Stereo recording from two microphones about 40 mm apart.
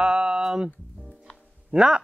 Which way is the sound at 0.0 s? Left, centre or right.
Centre.